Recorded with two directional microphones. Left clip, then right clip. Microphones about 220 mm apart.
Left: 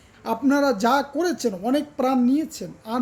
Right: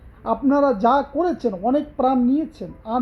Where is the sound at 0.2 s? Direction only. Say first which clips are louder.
Right 2 dB; 30° left (ahead or behind).